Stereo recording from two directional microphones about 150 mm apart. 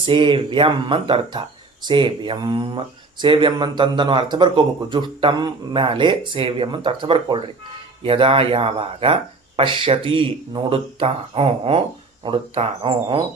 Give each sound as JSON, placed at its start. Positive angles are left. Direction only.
{"t": 0.0, "sound": "speech", "side_deg": -35}